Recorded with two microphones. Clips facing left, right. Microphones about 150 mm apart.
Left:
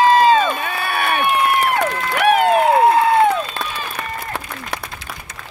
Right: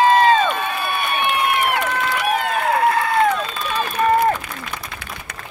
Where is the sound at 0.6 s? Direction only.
70° left (ahead or behind).